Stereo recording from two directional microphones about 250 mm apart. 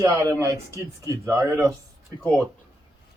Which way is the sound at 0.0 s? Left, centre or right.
Centre.